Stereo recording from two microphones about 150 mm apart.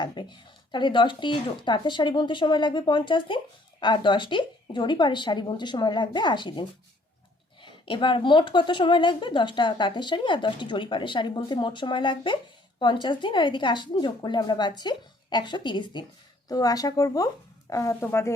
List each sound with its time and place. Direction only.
0.0 s speech: 30° left (ahead or behind)